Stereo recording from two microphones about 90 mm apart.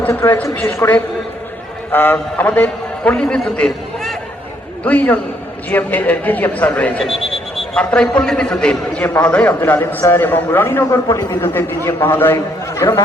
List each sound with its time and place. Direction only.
0.1 s a man's voice: 30° left (ahead or behind); by 3.7 s 10° left (ahead or behind)
4.8 s a man's voice: 15° left (ahead or behind)
7.0 s a man's voice: 5° left (ahead or behind); by 13.0 s 30° left (ahead or behind)